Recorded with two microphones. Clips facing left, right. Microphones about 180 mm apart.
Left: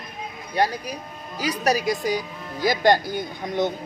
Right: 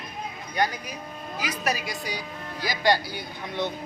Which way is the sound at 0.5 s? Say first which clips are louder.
Left 4 dB; 35° left (ahead or behind).